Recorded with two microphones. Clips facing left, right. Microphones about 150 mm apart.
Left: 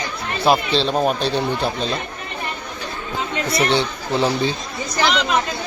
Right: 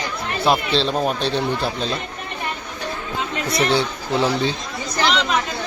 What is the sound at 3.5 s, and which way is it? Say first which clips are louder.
Speech: even; centre (ahead or behind).